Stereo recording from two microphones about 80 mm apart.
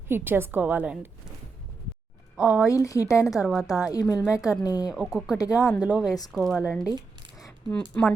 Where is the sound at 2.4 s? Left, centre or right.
Centre.